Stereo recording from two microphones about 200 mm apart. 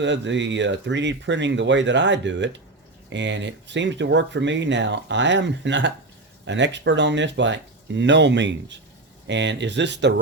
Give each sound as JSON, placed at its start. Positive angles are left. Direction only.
{"t": 0.0, "sound": "speech", "side_deg": -65}